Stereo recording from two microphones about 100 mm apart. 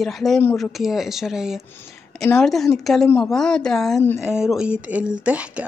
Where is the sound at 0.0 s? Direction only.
Centre (ahead or behind).